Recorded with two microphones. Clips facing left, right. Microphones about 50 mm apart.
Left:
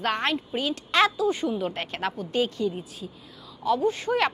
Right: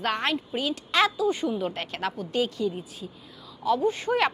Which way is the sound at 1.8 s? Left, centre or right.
Centre.